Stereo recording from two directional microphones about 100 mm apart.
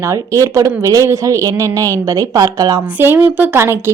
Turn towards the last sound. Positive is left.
turn(degrees=-25)  # may be behind; listen again after turning